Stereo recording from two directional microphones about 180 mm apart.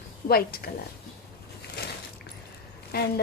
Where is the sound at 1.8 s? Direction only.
65° left (ahead or behind).